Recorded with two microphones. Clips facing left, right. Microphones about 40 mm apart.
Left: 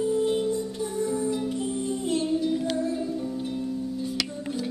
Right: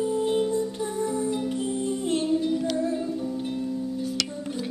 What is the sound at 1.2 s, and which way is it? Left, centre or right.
Music, right.